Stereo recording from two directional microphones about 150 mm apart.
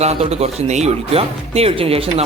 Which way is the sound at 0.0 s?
45° right (ahead or behind).